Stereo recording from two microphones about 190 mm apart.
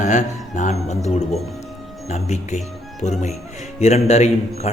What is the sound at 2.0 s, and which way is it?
A man's voice, 35° left (ahead or behind).